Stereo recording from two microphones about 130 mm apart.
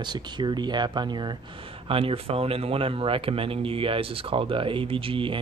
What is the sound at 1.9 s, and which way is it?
Speech, 45° right (ahead or behind).